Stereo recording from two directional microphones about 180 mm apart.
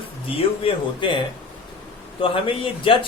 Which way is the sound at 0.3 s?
30° left (ahead or behind).